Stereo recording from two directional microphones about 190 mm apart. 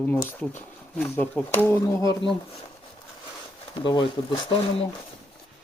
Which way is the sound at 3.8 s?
25° left (ahead or behind).